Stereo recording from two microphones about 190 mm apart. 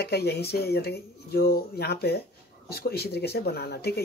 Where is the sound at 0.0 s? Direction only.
60° left (ahead or behind).